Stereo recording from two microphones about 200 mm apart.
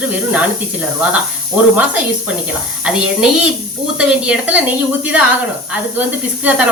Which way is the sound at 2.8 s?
5° right (ahead or behind).